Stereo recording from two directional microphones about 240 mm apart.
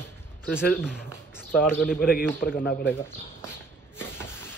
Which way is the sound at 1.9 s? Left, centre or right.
Left.